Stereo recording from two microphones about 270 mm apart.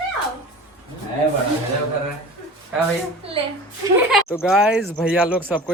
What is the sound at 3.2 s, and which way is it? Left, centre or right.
Speech, right.